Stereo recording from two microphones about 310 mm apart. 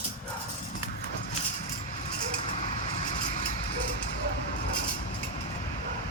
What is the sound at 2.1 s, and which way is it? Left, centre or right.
Vehicle, centre.